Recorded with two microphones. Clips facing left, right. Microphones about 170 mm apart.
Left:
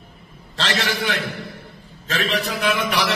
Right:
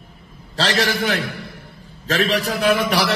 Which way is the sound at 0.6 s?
35° right (ahead or behind).